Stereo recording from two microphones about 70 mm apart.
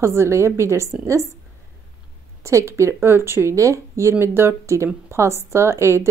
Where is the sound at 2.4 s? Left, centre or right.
Right.